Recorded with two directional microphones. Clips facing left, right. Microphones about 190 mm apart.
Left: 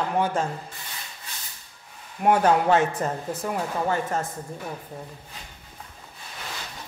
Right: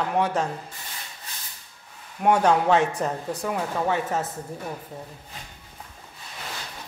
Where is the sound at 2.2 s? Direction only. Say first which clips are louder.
Even; 5° left (ahead or behind).